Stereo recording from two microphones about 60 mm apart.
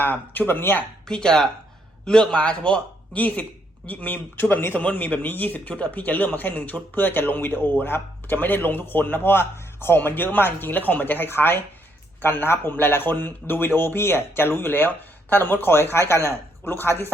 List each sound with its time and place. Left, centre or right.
0.0 s speech: left
1.0 s a man's voice: centre; by 16.9 s left